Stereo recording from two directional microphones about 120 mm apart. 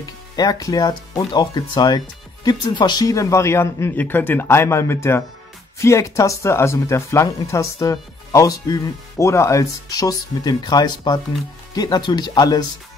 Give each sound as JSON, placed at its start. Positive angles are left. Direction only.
{"t": 0.4, "sound": "speech", "side_deg": 30}